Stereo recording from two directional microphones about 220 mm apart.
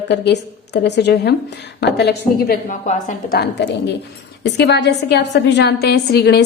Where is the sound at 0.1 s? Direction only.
50° left (ahead or behind).